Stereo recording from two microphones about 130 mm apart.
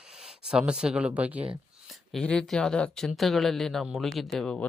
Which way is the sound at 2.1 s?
5° left (ahead or behind).